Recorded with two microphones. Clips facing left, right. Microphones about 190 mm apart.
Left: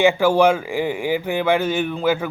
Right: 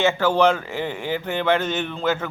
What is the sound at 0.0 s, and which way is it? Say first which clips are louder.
A man's voice: left 3 dB; 10° left (ahead or behind).